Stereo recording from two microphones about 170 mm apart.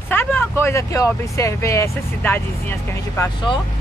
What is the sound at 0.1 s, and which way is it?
Speech, 10° left (ahead or behind).